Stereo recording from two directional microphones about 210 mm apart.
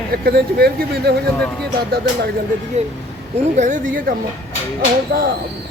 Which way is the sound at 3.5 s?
35° right (ahead or behind).